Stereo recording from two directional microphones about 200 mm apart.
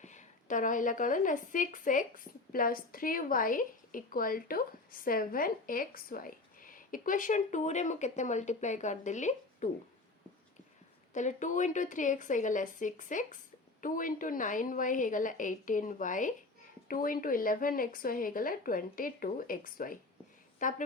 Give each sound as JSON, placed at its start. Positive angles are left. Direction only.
{"t": 0.0, "sound": "a woman's voice", "side_deg": 35}
{"t": 11.1, "sound": "a woman's voice", "side_deg": 40}